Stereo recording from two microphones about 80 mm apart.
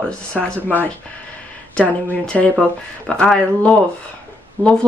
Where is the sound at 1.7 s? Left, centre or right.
Centre.